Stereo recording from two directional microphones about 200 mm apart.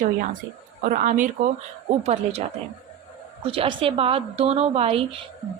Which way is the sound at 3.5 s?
25° right (ahead or behind).